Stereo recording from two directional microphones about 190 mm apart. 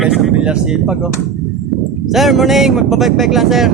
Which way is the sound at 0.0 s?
Centre (ahead or behind).